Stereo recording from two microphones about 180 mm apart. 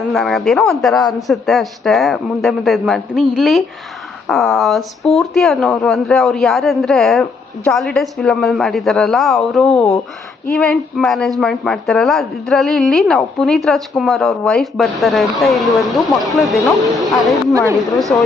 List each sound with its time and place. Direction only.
0.1 s speech: centre (ahead or behind)
16.8 s speech: 20° right (ahead or behind)